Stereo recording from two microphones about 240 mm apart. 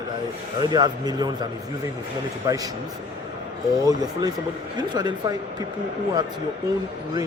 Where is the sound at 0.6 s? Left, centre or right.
Centre.